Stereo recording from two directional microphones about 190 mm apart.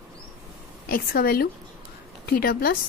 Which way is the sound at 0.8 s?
50° left (ahead or behind).